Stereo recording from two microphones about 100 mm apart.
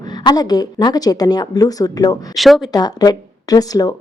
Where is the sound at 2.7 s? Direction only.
40° left (ahead or behind).